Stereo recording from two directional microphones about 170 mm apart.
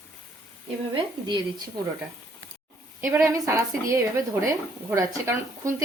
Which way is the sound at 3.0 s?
15° right (ahead or behind).